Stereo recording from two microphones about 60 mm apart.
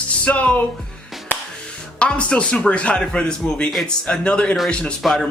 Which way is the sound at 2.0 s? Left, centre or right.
Centre.